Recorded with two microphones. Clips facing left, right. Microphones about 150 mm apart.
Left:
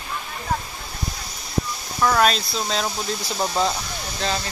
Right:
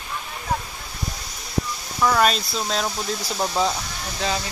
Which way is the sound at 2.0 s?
Centre (ahead or behind).